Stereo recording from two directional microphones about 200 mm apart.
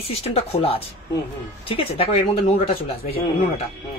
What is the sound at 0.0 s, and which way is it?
Speech, 30° left (ahead or behind).